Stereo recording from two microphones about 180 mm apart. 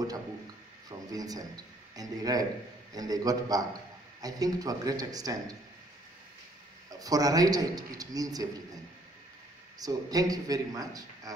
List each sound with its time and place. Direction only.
0.8 s a sound: 20° right (ahead or behind)
2.0 s a man's voice: 20° right (ahead or behind)
6.9 s a man's voice: 20° right (ahead or behind)
9.8 s a man's voice: 20° right (ahead or behind)